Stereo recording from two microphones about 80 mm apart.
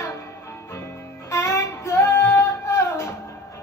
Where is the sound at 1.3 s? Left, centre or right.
Left.